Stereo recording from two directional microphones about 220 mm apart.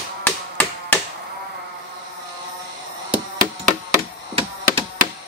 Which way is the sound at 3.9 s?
20° right (ahead or behind).